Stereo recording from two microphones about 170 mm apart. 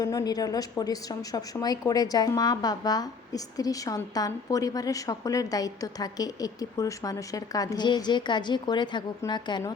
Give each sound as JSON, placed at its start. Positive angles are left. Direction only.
{"t": 0.0, "sound": "a woman's voice", "side_deg": 20}